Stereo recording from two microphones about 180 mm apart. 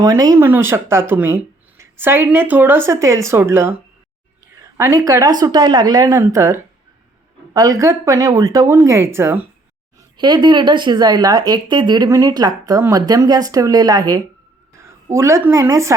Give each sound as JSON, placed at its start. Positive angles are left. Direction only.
{"t": 0.0, "sound": "a woman's voice", "side_deg": -20}
{"t": 10.2, "sound": "a woman's voice", "side_deg": -25}